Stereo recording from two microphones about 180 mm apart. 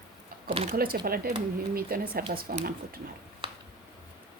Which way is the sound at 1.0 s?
55° right (ahead or behind).